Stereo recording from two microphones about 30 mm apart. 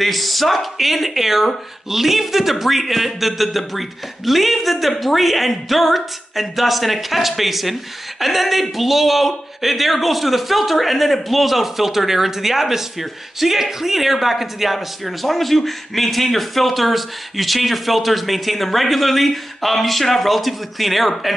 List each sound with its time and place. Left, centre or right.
0.0 s a man's voice: centre